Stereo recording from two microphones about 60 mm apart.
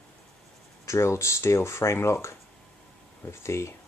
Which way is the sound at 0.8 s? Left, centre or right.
Left.